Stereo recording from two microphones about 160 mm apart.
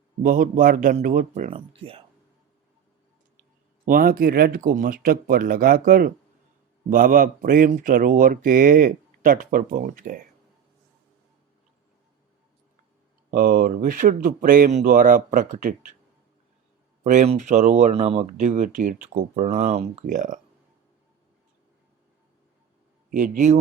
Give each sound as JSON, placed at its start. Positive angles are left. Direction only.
{"t": 0.2, "sound": "speech", "side_deg": -55}
{"t": 1.5, "sound": "speech", "side_deg": -35}
{"t": 3.8, "sound": "speech", "side_deg": -65}
{"t": 13.3, "sound": "speech", "side_deg": -65}
{"t": 17.0, "sound": "speech", "side_deg": -55}
{"t": 23.0, "sound": "speech", "side_deg": -55}